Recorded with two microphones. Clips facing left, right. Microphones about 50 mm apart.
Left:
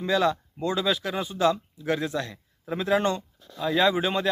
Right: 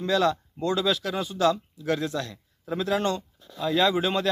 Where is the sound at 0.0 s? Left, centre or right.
Centre.